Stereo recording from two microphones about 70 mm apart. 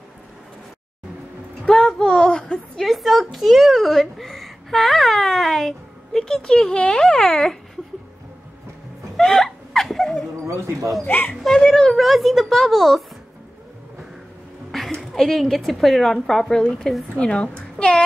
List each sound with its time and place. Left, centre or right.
1.7 s a woman's voice: centre
9.1 s laughter: centre
10.4 s speech: right
11.1 s a child's voice: left
11.4 s speech: centre
14.7 s a woman's voice: centre